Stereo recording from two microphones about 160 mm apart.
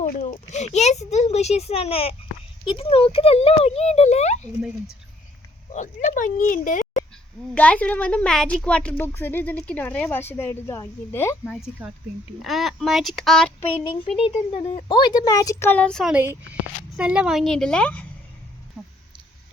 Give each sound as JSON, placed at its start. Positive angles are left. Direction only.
{"t": 0.2, "sound": "speech", "side_deg": 50}
{"t": 5.7, "sound": "speech", "side_deg": 50}
{"t": 7.5, "sound": "a woman's voice", "side_deg": 10}
{"t": 11.8, "sound": "speech", "side_deg": -10}
{"t": 14.2, "sound": "speech", "side_deg": 35}
{"t": 16.1, "sound": "speech", "side_deg": -15}